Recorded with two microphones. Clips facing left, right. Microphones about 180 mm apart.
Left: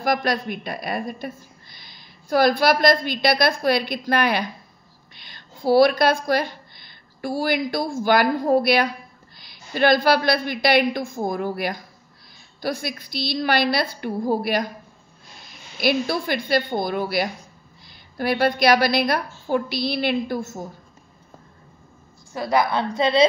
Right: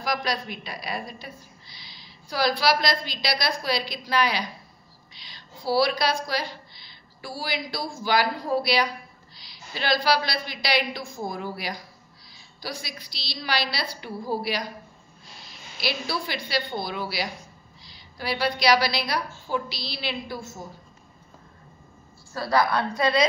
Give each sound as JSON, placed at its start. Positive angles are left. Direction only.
{"t": 0.0, "sound": "a woman's voice", "side_deg": 55}
{"t": 15.8, "sound": "a woman's voice", "side_deg": 50}
{"t": 22.3, "sound": "a woman's voice", "side_deg": 20}